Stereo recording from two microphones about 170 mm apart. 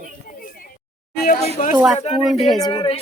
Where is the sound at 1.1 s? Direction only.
60° left (ahead or behind).